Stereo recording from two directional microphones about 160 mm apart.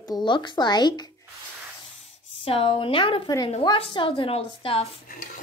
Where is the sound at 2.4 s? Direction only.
35° left (ahead or behind).